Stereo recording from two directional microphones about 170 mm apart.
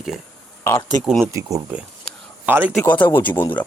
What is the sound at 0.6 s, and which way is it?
Speech, 15° left (ahead or behind).